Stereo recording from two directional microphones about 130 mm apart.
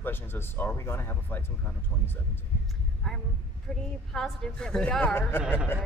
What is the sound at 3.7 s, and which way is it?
A woman's voice, 5° left (ahead or behind).